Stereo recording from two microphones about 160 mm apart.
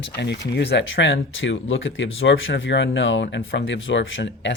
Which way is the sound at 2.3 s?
90° left.